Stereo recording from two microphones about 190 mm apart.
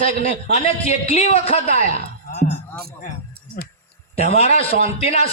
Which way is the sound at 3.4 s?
55° right (ahead or behind).